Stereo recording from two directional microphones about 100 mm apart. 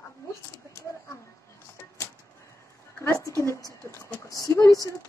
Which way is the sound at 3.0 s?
30° left (ahead or behind).